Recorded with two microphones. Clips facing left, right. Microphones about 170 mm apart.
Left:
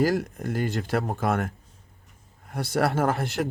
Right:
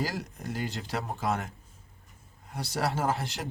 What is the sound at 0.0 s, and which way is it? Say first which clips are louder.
Speech: left 10 dB; 55° left (ahead or behind).